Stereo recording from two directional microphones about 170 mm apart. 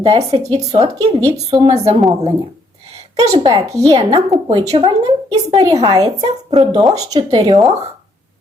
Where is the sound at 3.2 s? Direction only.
25° right (ahead or behind).